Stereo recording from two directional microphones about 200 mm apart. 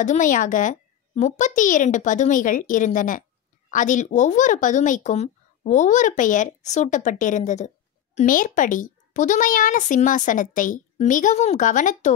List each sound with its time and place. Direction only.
0.0 s speech: 40° left (ahead or behind)